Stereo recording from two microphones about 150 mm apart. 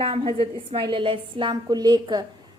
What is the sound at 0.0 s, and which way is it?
A woman's voice, 35° right (ahead or behind).